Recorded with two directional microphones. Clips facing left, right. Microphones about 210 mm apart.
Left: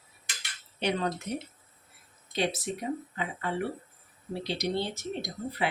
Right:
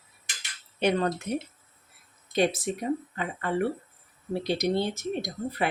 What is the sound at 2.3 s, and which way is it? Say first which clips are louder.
Speech: right 5 dB; 50° right (ahead or behind).